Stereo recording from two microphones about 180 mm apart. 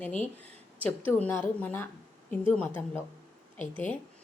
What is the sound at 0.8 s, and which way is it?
A woman's voice, 10° left (ahead or behind).